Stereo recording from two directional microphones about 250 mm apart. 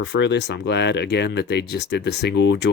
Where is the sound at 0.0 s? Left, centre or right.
Left.